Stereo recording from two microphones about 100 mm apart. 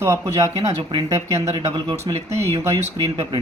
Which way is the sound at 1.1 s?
30° right (ahead or behind).